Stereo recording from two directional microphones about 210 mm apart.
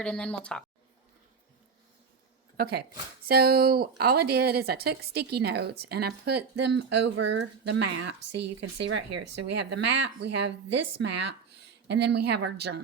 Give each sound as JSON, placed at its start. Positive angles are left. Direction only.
{"t": 0.0, "sound": "speech", "side_deg": 5}
{"t": 2.6, "sound": "a woman's voice", "side_deg": -50}